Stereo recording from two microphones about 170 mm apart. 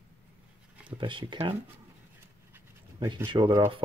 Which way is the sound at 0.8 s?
30° right (ahead or behind).